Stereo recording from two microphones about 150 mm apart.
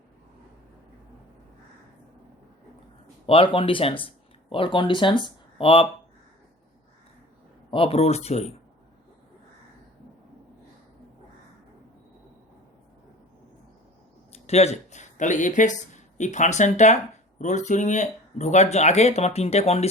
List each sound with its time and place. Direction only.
3.2 s speech: 40° left (ahead or behind)
7.7 s speech: 40° left (ahead or behind)
14.3 s speech: 45° left (ahead or behind)